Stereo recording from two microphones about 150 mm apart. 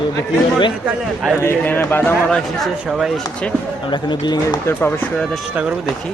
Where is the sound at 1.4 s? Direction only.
15° left (ahead or behind).